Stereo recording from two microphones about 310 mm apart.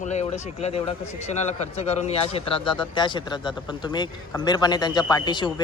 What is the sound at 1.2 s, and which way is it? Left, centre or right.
A man's voice, left.